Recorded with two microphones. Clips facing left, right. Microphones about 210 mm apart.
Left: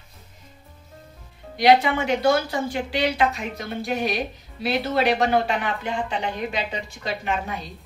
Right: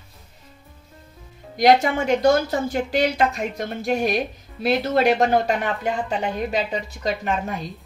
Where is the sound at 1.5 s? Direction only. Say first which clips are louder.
Right 1 dB; 45° right (ahead or behind).